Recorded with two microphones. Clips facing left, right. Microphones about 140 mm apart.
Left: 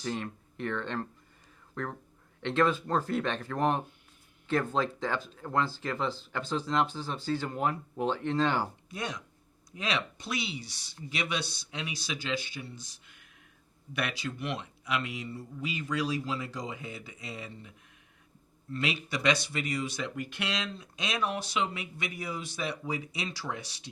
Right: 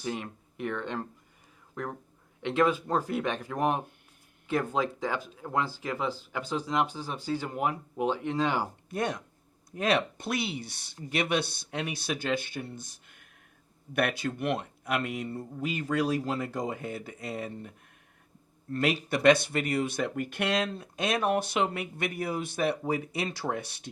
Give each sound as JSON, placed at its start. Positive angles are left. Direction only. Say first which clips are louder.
{"t": 0.0, "sound": "speech", "louder": "even", "side_deg": -10}
{"t": 8.9, "sound": "speech", "louder": "right 6 dB", "side_deg": -55}